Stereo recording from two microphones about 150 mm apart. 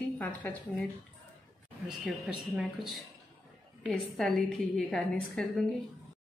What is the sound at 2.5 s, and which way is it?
A woman's voice, centre (ahead or behind).